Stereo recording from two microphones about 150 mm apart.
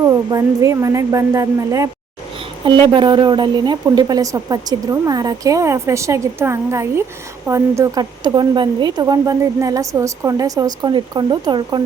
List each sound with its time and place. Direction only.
0.0 s a woman's voice: 25° right (ahead or behind)
2.8 s a woman's voice: 35° right (ahead or behind)